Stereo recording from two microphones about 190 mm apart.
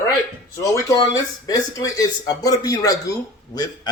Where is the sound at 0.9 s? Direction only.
20° left (ahead or behind).